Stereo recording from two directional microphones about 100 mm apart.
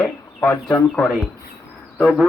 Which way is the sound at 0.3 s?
20° left (ahead or behind).